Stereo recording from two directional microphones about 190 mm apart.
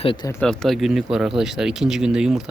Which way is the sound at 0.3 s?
5° left (ahead or behind).